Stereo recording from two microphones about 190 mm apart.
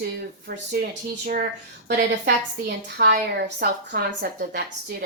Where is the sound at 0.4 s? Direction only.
55° right (ahead or behind).